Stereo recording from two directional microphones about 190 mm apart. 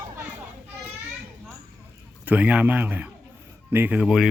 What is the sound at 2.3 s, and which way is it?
A man's voice, 5° right (ahead or behind).